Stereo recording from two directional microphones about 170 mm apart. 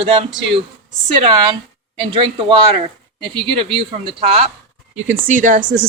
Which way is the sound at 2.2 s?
30° right (ahead or behind).